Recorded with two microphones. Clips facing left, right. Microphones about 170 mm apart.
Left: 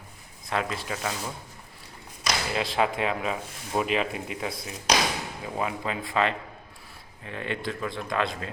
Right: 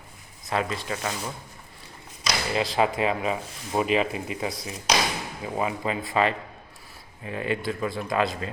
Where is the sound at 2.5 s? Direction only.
Centre (ahead or behind).